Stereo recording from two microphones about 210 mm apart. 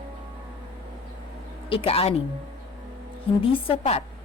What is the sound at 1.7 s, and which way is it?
Speech, 25° left (ahead or behind).